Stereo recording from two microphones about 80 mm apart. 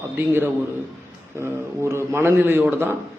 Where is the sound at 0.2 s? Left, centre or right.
Right.